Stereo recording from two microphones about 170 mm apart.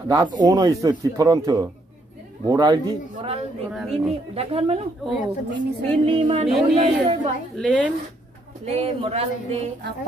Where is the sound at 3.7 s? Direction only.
Centre (ahead or behind).